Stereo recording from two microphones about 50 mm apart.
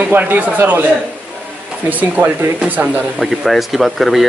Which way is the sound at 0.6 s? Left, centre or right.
Right.